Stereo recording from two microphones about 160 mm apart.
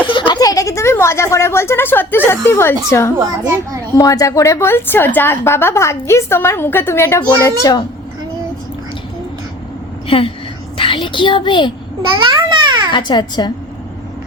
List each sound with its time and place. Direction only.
0.1 s speech: 30° left (ahead or behind)
3.2 s a child's voice: 15° right (ahead or behind)
3.9 s a woman's voice: 20° left (ahead or behind)
10.1 s a woman's voice: 35° left (ahead or behind)
12.1 s babbling: 30° right (ahead or behind)
12.9 s a child's voice: 30° left (ahead or behind)